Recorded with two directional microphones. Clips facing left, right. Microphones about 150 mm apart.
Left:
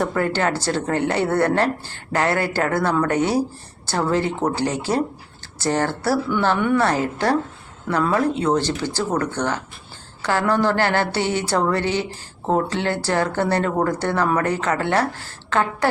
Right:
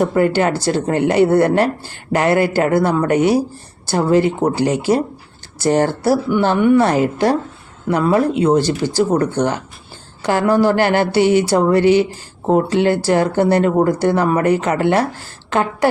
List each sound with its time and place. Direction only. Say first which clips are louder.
0.1 s a woman's voice: right 6 dB; 15° right (ahead or behind)